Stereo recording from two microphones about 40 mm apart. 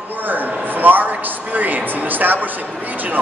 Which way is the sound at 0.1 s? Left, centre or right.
Right.